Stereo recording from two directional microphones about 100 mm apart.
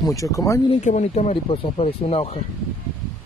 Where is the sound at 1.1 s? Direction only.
85° left.